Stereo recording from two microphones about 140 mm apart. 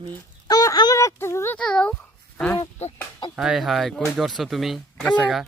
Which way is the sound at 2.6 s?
50° left (ahead or behind).